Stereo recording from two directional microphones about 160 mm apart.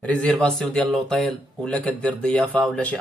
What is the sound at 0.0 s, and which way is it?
Speech, 5° left (ahead or behind).